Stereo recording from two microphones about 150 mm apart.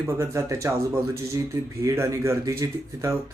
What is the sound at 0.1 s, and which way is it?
Speech, 20° right (ahead or behind).